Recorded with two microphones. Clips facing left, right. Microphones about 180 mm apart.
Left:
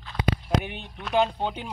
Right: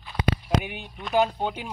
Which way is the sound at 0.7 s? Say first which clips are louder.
Right 1 dB; 5° right (ahead or behind).